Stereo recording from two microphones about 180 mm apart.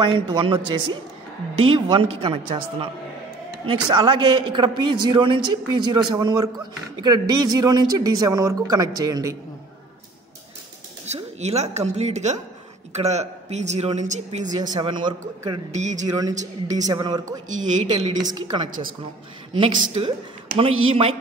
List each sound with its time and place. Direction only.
0.0 s a man's voice: 25° right (ahead or behind)
11.1 s a woman's voice: 35° right (ahead or behind)
14.7 s a man's voice: 25° right (ahead or behind)
15.7 s speech: 40° right (ahead or behind)
16.1 s a man's voice: 20° right (ahead or behind)
16.3 s speech: 40° right (ahead or behind)
16.9 s a man's voice: 20° right (ahead or behind)
17.6 s speech: 35° right (ahead or behind)
20.5 s speech: 30° right (ahead or behind)